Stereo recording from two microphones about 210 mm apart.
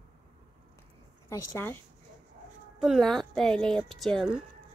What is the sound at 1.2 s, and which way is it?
Speech, 15° left (ahead or behind).